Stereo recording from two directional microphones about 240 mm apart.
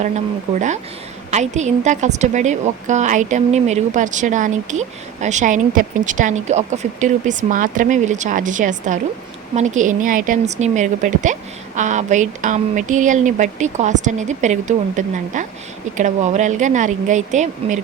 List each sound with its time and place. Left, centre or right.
1.3 s a woman's voice: right